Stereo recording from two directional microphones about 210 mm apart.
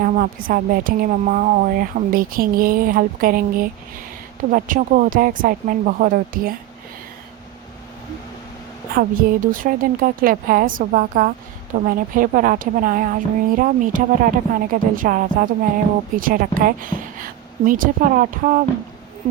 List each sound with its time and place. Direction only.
0.0 s a woman's voice: 40° right (ahead or behind)
9.0 s a woman's voice: 40° right (ahead or behind)